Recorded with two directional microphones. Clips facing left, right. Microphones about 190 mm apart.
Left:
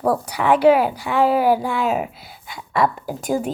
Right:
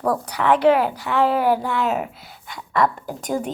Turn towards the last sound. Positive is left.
turn(degrees=5)  # may be behind; listen again after turning